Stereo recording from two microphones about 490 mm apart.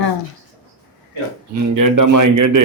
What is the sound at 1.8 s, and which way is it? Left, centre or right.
Speech, right.